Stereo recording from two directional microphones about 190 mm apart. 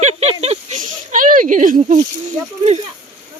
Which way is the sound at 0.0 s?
35° right (ahead or behind).